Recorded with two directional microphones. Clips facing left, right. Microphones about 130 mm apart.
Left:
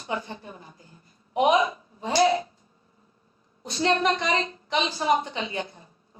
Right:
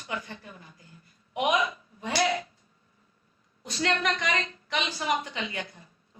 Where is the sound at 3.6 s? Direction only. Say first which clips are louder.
Left 5 dB; 30° left (ahead or behind).